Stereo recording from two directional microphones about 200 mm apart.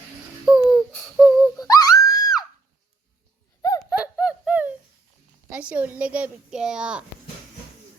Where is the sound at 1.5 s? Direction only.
15° left (ahead or behind).